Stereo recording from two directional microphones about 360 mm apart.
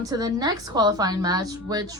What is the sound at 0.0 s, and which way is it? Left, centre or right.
A woman's voice, centre.